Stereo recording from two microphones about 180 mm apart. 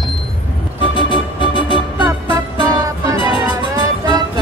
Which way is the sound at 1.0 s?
25° left (ahead or behind).